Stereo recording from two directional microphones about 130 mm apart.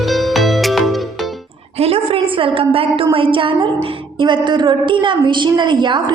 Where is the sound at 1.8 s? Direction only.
50° right (ahead or behind).